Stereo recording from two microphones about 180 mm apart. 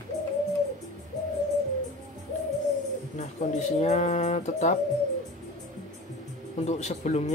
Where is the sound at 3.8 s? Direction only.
40° left (ahead or behind).